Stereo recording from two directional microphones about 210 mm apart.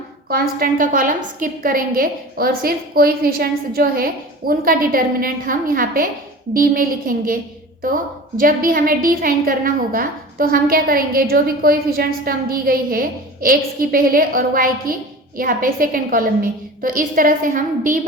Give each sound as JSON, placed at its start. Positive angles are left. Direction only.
{"t": 0.3, "sound": "a woman's voice", "side_deg": -45}